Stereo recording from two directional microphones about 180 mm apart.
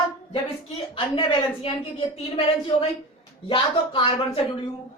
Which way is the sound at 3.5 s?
25° left (ahead or behind).